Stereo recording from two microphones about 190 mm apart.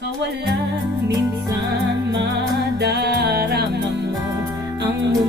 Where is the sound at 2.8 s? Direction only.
60° right (ahead or behind).